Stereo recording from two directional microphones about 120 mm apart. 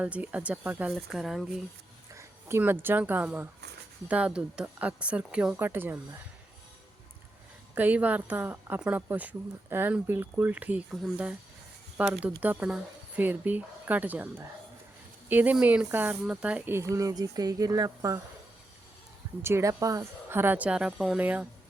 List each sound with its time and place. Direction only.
0.0 s a woman's voice: 10° right (ahead or behind)
0.9 s speech: centre (ahead or behind)
2.1 s a woman's voice: 20° right (ahead or behind)
5.5 s a woman's voice: 15° right (ahead or behind)
7.8 s a woman's voice: 15° right (ahead or behind)
12.0 s a woman's voice: 10° right (ahead or behind)
16.7 s speech: 25° right (ahead or behind)
19.4 s a woman's voice: 20° right (ahead or behind)